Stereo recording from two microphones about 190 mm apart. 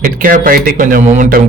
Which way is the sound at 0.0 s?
45° right (ahead or behind).